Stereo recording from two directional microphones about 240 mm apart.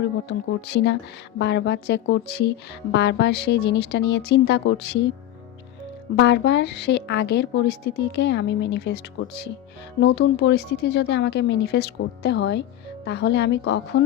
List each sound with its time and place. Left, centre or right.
0.3 s a woman's voice: left
6.1 s a woman's voice: left